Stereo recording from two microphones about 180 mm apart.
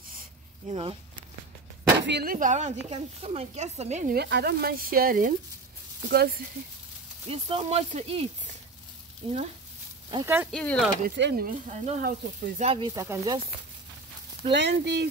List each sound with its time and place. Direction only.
0.7 s speech: 35° right (ahead or behind)
2.0 s speech: 65° right (ahead or behind)
2.3 s speech: 40° right (ahead or behind)
4.1 s speech: 65° right (ahead or behind)
7.2 s speech: 30° right (ahead or behind)
10.2 s speech: 10° right (ahead or behind)
10.5 s speech: 5° left (ahead or behind)
11.1 s speech: 65° right (ahead or behind)
11.4 s speech: 40° right (ahead or behind)
12.6 s speech: 30° right (ahead or behind)
12.9 s speech: 15° right (ahead or behind)
14.5 s speech: 70° right (ahead or behind)